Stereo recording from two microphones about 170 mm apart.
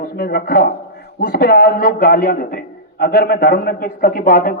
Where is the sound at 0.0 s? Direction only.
65° left (ahead or behind).